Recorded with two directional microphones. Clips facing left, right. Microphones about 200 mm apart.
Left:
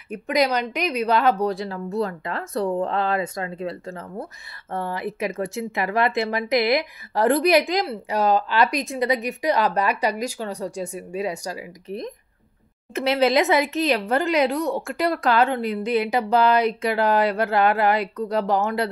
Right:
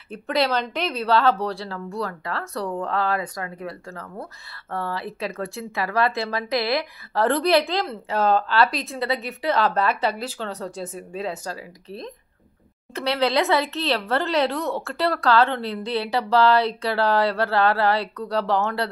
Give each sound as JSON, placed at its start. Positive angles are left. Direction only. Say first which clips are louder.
{"t": 0.1, "sound": "speech", "louder": "left 1 dB", "side_deg": 15}